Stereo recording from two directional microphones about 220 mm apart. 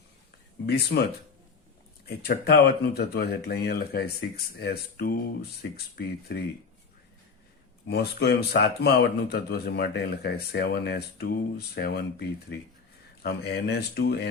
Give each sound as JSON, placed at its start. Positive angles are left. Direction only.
{"t": 0.7, "sound": "speech", "side_deg": 45}
{"t": 2.0, "sound": "speech", "side_deg": 45}
{"t": 7.9, "sound": "speech", "side_deg": 45}